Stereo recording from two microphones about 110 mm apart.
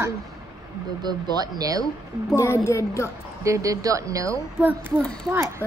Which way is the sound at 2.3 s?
25° left (ahead or behind).